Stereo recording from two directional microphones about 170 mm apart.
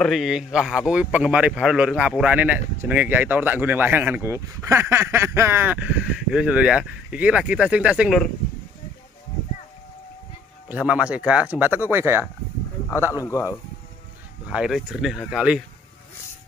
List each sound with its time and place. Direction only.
0.0 s speech: centre (ahead or behind)
10.7 s speech: 5° right (ahead or behind)
13.1 s speech: 20° left (ahead or behind)
14.5 s speech: 5° right (ahead or behind)